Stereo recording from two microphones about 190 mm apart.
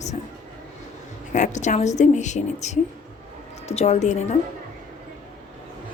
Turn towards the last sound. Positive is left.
turn(degrees=35)  # may be behind; listen again after turning